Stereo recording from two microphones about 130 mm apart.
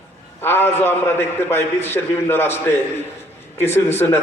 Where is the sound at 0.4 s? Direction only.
15° left (ahead or behind).